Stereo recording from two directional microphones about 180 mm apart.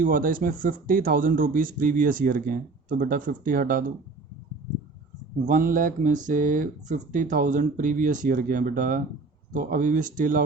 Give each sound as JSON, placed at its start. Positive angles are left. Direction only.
{"t": 0.0, "sound": "speech", "side_deg": -50}
{"t": 5.5, "sound": "speech", "side_deg": -50}